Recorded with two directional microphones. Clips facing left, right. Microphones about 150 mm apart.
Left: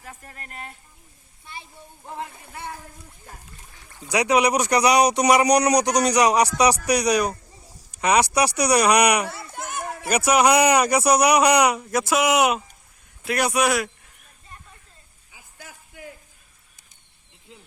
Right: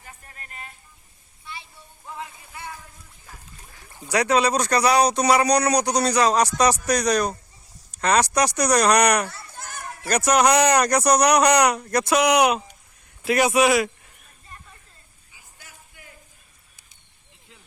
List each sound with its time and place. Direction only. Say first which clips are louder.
0.0 s speech: left 4 dB; 65° left (ahead or behind)
2.0 s speech: left 2 dB; 55° left (ahead or behind)
4.1 s a man's voice: left 1 dB; 15° left (ahead or behind)
9.2 s a sound: left 4 dB; 65° left (ahead or behind)
10.1 s a man's voice: even; 10° left (ahead or behind)